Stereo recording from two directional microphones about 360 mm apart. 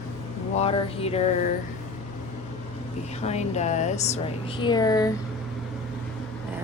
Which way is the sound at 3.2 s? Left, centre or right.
Centre.